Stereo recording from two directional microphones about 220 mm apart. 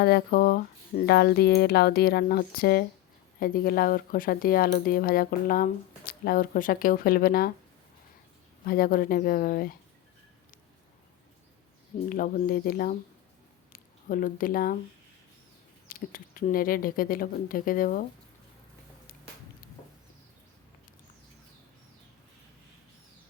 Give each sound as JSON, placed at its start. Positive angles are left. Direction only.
{"t": 0.0, "sound": "speech", "side_deg": 45}
{"t": 8.6, "sound": "speech", "side_deg": 40}
{"t": 12.0, "sound": "speech", "side_deg": 40}
{"t": 15.9, "sound": "speech", "side_deg": 40}